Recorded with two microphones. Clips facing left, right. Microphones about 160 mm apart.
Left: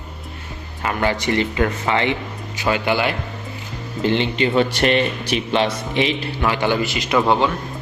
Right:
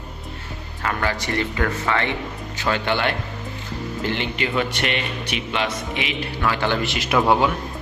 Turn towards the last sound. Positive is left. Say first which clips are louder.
# left 1 dB
turn(degrees=-5)  # may be behind; listen again after turning